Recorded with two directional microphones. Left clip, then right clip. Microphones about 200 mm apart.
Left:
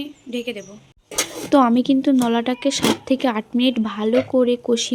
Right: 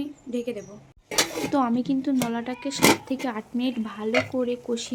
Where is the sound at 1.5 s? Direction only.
35° left (ahead or behind).